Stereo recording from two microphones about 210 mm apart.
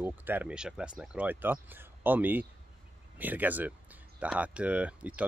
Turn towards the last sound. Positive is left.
turn(degrees=-5)  # may be behind; listen again after turning